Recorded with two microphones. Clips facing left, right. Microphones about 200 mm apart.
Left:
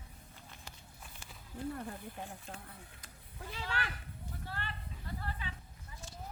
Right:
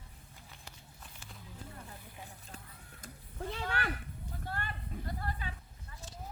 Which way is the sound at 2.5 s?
50° left (ahead or behind).